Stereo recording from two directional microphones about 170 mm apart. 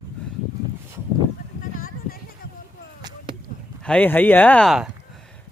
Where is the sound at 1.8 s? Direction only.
60° left (ahead or behind).